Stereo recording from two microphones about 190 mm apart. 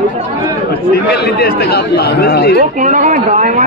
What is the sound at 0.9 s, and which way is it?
Speech, 60° left (ahead or behind).